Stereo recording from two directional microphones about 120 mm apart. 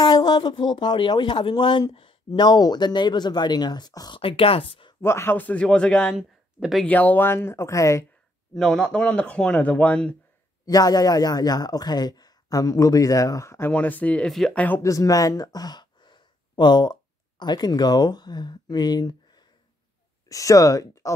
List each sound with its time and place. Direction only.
0.0 s speech: 35° left (ahead or behind)
4.2 s speech: 50° left (ahead or behind)
5.0 s speech: 20° left (ahead or behind); by 6.9 s centre (ahead or behind)
6.9 s speech: 15° left (ahead or behind)
8.5 s speech: 5° left (ahead or behind)
10.6 s speech: 30° left (ahead or behind); by 14.6 s centre (ahead or behind)
14.8 s speech: 25° left (ahead or behind)